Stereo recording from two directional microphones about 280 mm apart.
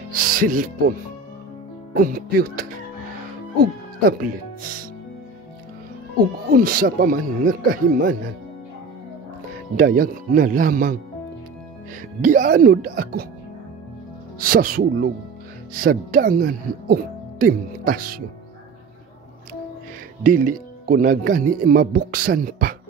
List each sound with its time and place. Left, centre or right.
0.1 s speech: right
2.0 s speech: right
6.5 s speech: right
9.8 s speech: right
12.2 s speech: right
14.4 s speech: right
20.2 s speech: right